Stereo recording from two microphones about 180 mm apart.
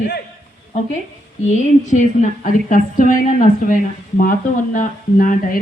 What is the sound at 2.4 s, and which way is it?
Speech, 45° left (ahead or behind).